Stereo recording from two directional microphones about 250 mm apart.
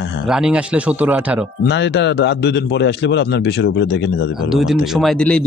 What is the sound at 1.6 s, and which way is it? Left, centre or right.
A man's voice, left.